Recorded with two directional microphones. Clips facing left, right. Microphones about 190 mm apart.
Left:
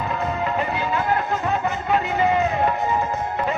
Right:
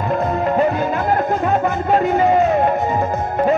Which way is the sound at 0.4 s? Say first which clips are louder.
Right 7 dB; 45° right (ahead or behind).